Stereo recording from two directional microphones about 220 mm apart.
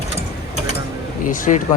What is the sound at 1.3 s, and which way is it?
Speech, 35° left (ahead or behind).